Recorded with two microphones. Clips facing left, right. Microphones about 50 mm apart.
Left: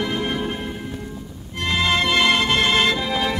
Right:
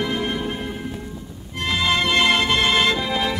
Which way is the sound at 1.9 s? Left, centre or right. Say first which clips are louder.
Even; centre.